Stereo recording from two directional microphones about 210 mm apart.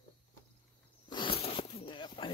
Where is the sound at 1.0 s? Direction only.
20° left (ahead or behind).